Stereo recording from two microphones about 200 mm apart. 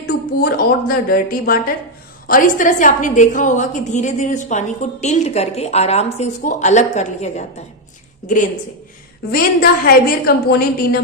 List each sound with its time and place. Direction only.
0.0 s a woman's voice: 45° left (ahead or behind)
9.3 s speech: 50° left (ahead or behind)